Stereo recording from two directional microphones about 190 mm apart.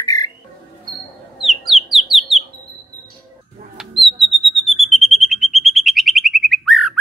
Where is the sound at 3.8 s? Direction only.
Centre (ahead or behind).